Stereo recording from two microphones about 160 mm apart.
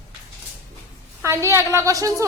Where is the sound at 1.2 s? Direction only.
15° right (ahead or behind).